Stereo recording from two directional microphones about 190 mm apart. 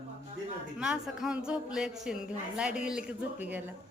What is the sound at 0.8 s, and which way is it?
A woman's voice, 5° right (ahead or behind).